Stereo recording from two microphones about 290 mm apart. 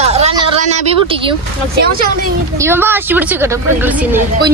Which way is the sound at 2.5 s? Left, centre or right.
Centre.